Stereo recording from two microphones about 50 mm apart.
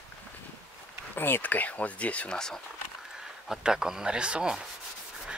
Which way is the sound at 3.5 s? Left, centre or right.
Centre.